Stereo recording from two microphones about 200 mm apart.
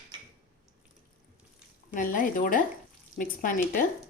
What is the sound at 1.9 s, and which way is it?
Speech, 40° left (ahead or behind).